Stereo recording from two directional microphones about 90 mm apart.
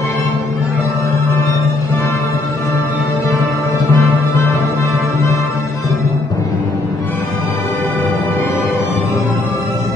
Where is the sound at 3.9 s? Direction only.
25° left (ahead or behind).